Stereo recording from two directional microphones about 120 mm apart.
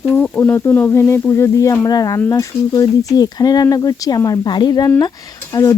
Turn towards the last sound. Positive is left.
turn(degrees=30)  # may be behind; listen again after turning